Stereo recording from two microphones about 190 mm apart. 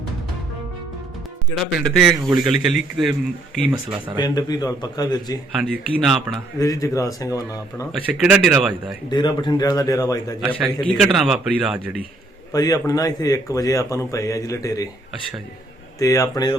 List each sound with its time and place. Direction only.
1.8 s a man's voice: centre (ahead or behind)
4.2 s a man's voice: 20° left (ahead or behind)
5.5 s a man's voice: centre (ahead or behind)
6.6 s speech: 20° left (ahead or behind)
8.0 s a man's voice: 5° right (ahead or behind)
9.0 s a man's voice: 25° left (ahead or behind)
10.5 s a man's voice: 5° left (ahead or behind)
12.5 s speech: 20° left (ahead or behind)
16.0 s speech: 15° left (ahead or behind)